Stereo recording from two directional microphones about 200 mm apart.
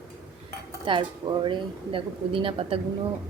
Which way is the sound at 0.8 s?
25° right (ahead or behind).